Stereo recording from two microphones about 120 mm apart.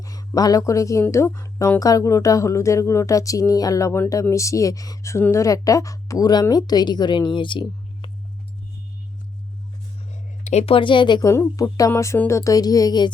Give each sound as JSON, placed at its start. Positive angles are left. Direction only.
{"t": 0.0, "sound": "speech", "side_deg": 30}
{"t": 10.1, "sound": "a sound", "side_deg": 65}
{"t": 10.8, "sound": "speech", "side_deg": 40}
{"t": 11.3, "sound": "speech", "side_deg": 25}